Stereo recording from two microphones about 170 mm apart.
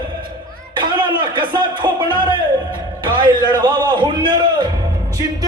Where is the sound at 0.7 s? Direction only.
30° right (ahead or behind).